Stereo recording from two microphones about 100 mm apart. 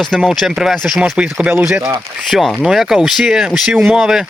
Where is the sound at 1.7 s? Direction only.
30° right (ahead or behind).